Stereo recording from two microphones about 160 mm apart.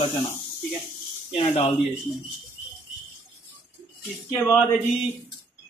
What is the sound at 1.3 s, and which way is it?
Speech, 40° left (ahead or behind).